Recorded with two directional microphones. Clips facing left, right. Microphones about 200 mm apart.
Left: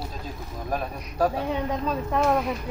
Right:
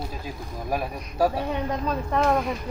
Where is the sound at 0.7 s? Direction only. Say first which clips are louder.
Right 1 dB; 10° right (ahead or behind).